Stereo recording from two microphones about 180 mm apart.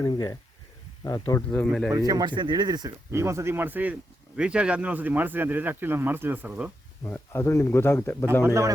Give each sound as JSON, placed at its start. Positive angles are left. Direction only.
{"t": 0.0, "sound": "speech", "side_deg": 20}
{"t": 1.4, "sound": "speech", "side_deg": 10}
{"t": 1.9, "sound": "speech", "side_deg": -20}
{"t": 7.0, "sound": "speech", "side_deg": 15}
{"t": 8.4, "sound": "speech", "side_deg": -15}